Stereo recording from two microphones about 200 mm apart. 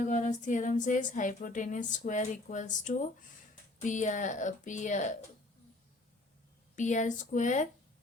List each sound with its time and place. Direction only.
0.0 s speech: 40° left (ahead or behind)
6.7 s speech: 40° left (ahead or behind)